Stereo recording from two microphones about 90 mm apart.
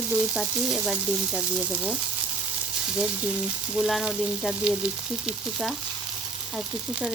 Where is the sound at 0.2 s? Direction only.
5° right (ahead or behind).